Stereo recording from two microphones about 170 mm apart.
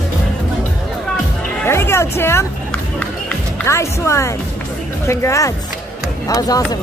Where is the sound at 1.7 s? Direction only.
15° left (ahead or behind).